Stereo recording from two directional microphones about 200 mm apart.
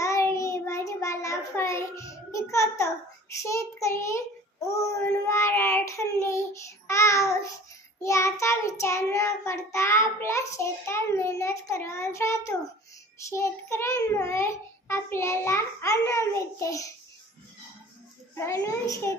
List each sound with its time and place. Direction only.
0.0 s child singing: 15° left (ahead or behind)
18.3 s child singing: 15° left (ahead or behind)